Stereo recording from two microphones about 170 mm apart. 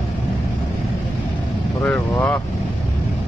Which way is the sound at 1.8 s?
10° left (ahead or behind).